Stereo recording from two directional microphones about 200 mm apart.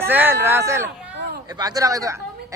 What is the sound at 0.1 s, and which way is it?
Speech, 10° right (ahead or behind).